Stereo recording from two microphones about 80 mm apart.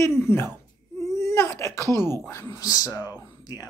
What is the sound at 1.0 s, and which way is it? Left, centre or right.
Baby cry, left.